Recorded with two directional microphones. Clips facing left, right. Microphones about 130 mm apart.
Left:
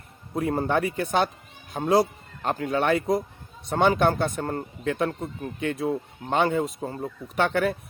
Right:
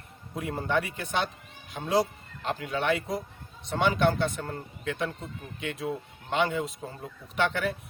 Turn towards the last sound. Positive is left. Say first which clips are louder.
# left 4 dB
turn(degrees=45)  # may be behind; listen again after turning